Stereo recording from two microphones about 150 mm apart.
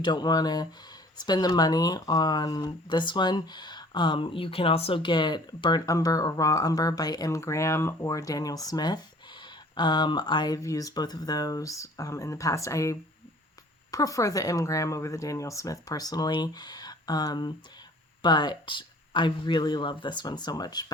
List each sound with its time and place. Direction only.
0.0 s speech: 30° left (ahead or behind)